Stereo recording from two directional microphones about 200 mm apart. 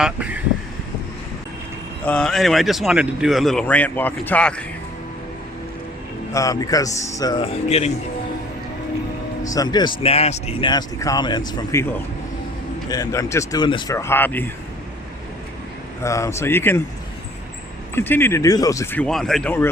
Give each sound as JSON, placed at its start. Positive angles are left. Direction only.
{"t": 0.0, "sound": "speech", "side_deg": -5}
{"t": 2.0, "sound": "speech", "side_deg": 5}
{"t": 6.3, "sound": "speech", "side_deg": 15}
{"t": 9.5, "sound": "speech", "side_deg": 20}
{"t": 12.9, "sound": "speech", "side_deg": 15}
{"t": 16.0, "sound": "speech", "side_deg": 15}
{"t": 17.9, "sound": "speech", "side_deg": 10}